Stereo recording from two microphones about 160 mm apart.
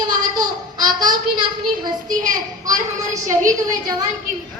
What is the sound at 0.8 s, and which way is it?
Speech, 25° right (ahead or behind).